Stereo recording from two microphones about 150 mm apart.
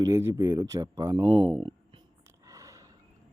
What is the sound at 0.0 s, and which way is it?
Speech, 20° right (ahead or behind).